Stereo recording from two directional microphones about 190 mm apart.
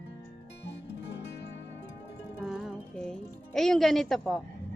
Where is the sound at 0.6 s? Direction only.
65° left (ahead or behind).